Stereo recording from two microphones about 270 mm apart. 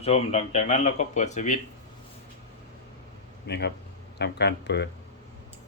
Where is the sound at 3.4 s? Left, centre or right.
Left.